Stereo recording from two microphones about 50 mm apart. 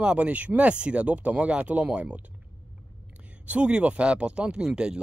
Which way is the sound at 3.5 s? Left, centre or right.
Right.